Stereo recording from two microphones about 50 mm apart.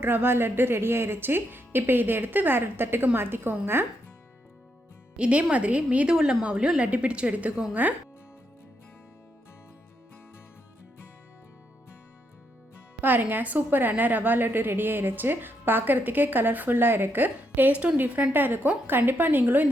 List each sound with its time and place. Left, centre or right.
0.0 s speech: right
5.1 s a woman's voice: right
13.0 s a woman's voice: right
18.3 s a woman's voice: right